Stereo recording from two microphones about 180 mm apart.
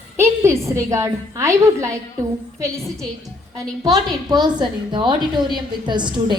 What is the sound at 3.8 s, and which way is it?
A woman's voice, 20° right (ahead or behind).